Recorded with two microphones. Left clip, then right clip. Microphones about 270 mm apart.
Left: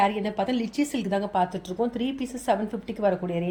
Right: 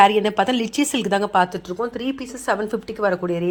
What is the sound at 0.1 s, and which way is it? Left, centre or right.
Speech, centre.